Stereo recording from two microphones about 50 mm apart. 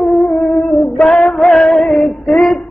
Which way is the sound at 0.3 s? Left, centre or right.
Left.